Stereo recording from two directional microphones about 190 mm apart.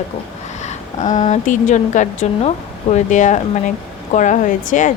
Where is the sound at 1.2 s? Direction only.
40° left (ahead or behind).